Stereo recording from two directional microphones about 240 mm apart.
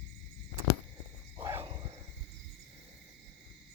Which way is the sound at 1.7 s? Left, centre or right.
Right.